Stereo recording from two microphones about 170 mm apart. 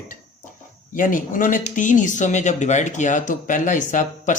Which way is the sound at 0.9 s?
50° left (ahead or behind).